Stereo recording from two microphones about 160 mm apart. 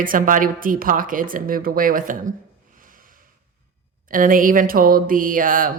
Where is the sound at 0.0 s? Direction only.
60° right (ahead or behind).